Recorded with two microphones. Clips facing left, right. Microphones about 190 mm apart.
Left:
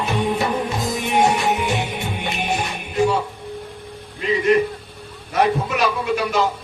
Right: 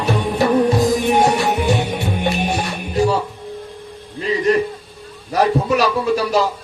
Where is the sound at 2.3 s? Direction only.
35° right (ahead or behind).